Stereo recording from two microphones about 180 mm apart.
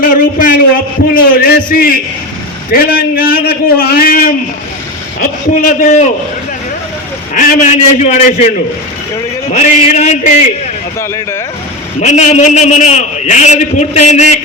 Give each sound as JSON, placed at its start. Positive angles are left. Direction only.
{"t": 0.0, "sound": "a sound", "side_deg": 50}
{"t": 1.1, "sound": "a man's voice", "side_deg": 55}
{"t": 7.3, "sound": "a man's voice", "side_deg": 40}
{"t": 9.5, "sound": "a man's voice", "side_deg": 40}
{"t": 11.9, "sound": "a man's voice", "side_deg": 40}